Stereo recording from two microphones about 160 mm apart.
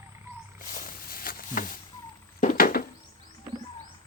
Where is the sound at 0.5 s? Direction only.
60° left (ahead or behind).